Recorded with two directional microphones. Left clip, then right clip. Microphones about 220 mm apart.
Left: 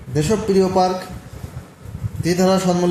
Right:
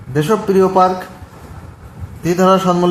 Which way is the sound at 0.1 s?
15° right (ahead or behind).